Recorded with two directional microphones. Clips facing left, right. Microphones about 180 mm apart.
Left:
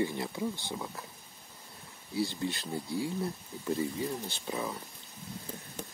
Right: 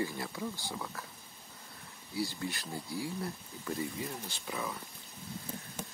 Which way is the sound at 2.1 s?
25° left (ahead or behind).